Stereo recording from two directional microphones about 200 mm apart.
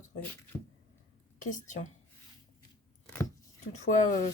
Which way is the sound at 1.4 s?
40° left (ahead or behind).